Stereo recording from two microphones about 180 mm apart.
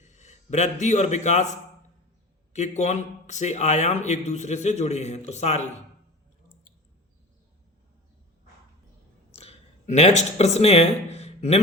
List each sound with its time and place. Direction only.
0.0 s a man's voice: 40° left (ahead or behind)
2.5 s speech: 40° left (ahead or behind)
9.3 s a sound: 35° left (ahead or behind)